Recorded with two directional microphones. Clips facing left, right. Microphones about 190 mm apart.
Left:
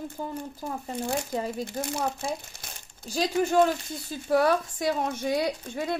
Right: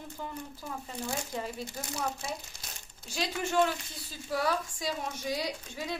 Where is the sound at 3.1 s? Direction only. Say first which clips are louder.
Left 8 dB; 40° left (ahead or behind).